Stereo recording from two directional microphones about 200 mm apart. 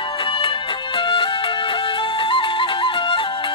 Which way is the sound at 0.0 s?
25° left (ahead or behind).